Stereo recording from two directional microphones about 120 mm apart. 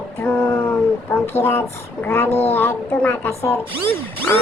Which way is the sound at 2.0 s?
20° left (ahead or behind).